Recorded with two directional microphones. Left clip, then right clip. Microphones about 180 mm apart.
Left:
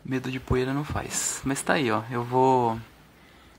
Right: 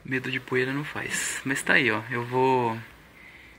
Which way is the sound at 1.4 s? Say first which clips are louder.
Right 3 dB; 20° left (ahead or behind).